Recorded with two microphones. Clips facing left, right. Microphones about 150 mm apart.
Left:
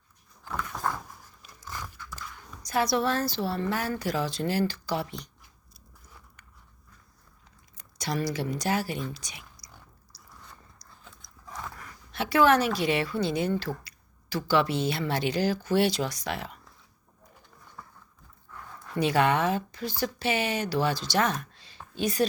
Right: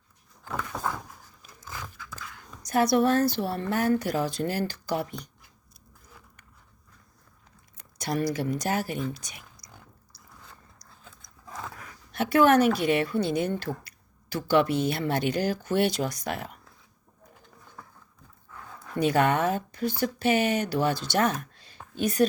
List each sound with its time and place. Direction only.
2.6 s speech: 55° right (ahead or behind)
7.9 s speech: 55° right (ahead or behind)
12.1 s speech: 50° right (ahead or behind)
18.9 s speech: 50° right (ahead or behind)